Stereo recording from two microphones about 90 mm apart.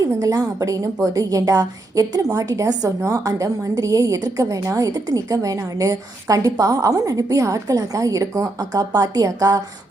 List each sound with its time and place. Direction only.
0.0 s a woman's voice: 40° right (ahead or behind)